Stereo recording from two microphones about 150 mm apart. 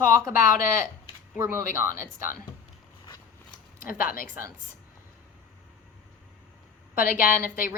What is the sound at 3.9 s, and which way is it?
Speech, 70° left (ahead or behind).